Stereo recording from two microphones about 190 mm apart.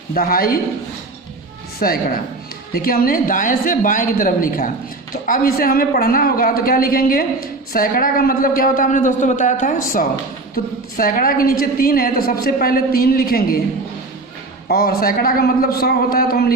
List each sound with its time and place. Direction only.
0.1 s a woman's voice: 50° left (ahead or behind)
1.8 s a woman's voice: 50° left (ahead or behind)
14.7 s a woman's voice: 55° left (ahead or behind)